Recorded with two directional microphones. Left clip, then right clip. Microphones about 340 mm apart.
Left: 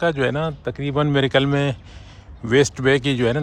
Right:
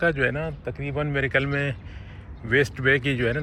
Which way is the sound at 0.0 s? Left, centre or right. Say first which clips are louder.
Left 3 dB; centre.